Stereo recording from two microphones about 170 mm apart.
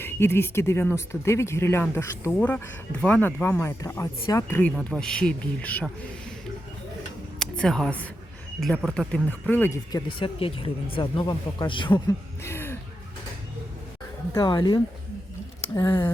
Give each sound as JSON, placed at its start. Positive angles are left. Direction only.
{"t": 0.0, "sound": "speech", "side_deg": 15}
{"t": 7.3, "sound": "a woman's voice", "side_deg": 5}
{"t": 9.9, "sound": "speech", "side_deg": 30}
{"t": 14.3, "sound": "speech", "side_deg": 25}